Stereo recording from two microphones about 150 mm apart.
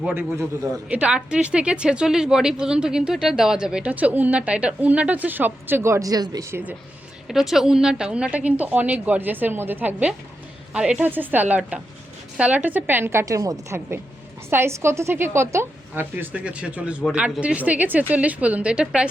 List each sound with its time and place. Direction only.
0.0 s a woman's voice: 15° right (ahead or behind)
7.3 s a woman's voice: centre (ahead or behind)